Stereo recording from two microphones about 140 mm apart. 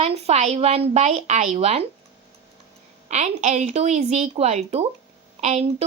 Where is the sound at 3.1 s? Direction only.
55° right (ahead or behind).